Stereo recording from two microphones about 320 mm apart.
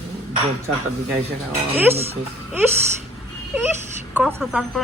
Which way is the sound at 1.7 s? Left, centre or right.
Centre.